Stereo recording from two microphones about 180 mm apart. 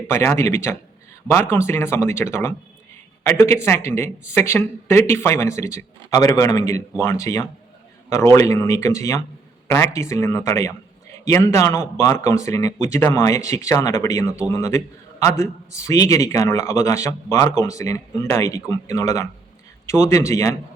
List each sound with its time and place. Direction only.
0.1 s speech: 15° left (ahead or behind)